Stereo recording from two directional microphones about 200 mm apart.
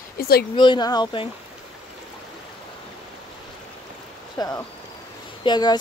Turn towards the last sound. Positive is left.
turn(degrees=20)  # may be behind; listen again after turning